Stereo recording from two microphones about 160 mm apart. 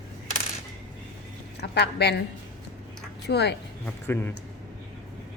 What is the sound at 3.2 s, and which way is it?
Speech, 90° left.